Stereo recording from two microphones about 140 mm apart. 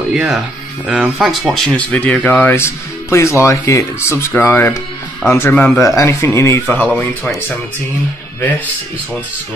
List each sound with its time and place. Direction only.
0.1 s speech: 5° right (ahead or behind)
8.4 s speech: 10° left (ahead or behind)